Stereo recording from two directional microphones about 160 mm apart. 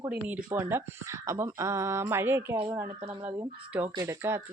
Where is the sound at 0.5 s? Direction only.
15° right (ahead or behind).